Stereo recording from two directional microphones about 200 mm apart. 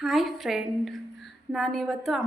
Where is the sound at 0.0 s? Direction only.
Centre (ahead or behind).